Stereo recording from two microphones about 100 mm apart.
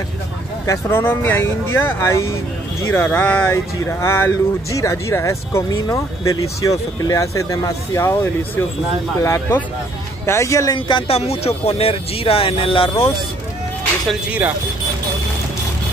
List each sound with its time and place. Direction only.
0.7 s speech: 25° left (ahead or behind)
11.1 s speech: 90° left; by 13.1 s 65° left (ahead or behind)